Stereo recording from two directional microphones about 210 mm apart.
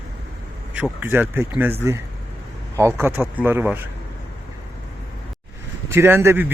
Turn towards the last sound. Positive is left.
turn(degrees=-10)  # may be behind; listen again after turning